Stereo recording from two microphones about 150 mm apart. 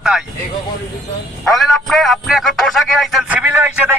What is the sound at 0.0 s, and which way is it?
Speech, 5° right (ahead or behind).